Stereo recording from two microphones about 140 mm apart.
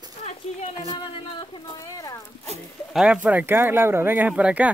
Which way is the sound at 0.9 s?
35° left (ahead or behind).